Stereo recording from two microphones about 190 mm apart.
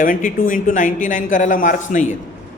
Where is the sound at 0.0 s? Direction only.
45° left (ahead or behind).